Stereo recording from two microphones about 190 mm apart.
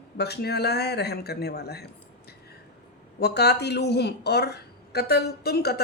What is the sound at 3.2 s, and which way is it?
Speech, 60° left (ahead or behind).